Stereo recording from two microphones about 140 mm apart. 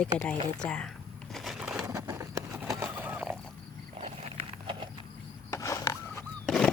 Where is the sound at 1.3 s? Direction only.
Centre (ahead or behind).